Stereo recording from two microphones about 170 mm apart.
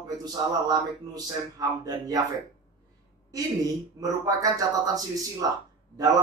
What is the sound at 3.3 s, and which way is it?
Speech, 20° right (ahead or behind).